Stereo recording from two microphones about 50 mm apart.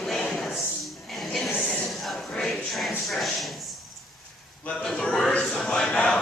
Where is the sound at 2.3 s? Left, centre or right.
Centre.